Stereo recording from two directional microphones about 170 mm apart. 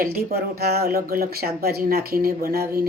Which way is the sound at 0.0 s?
60° right (ahead or behind).